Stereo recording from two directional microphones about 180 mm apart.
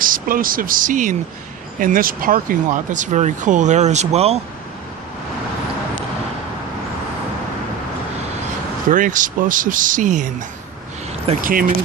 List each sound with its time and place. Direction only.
0.0 s speech: 50° right (ahead or behind)
8.9 s speech: 45° right (ahead or behind)
11.3 s speech: 35° right (ahead or behind)